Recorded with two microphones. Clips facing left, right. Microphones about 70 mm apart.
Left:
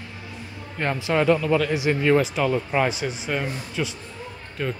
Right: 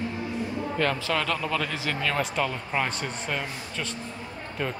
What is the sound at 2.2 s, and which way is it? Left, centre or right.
A man's voice, centre.